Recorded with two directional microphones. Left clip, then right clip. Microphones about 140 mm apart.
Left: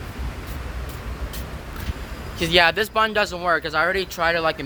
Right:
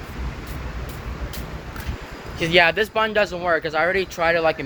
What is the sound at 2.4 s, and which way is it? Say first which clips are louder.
Speech: right 1 dB; 25° left (ahead or behind).